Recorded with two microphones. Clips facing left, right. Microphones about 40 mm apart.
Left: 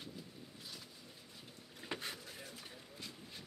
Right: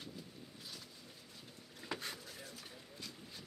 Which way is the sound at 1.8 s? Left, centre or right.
Centre.